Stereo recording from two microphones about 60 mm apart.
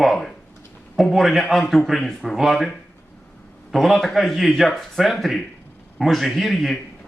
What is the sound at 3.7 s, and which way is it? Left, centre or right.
A man's voice, centre.